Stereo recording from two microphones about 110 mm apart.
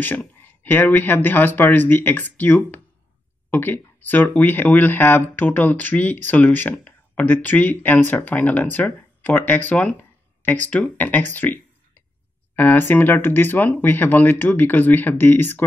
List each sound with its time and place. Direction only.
0.4 s speech: 15° left (ahead or behind)